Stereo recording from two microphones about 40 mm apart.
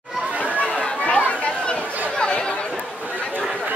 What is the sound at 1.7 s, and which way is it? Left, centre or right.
Chatter, left.